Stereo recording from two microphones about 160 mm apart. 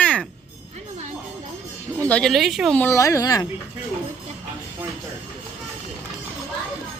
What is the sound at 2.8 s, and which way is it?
Speech, 20° left (ahead or behind).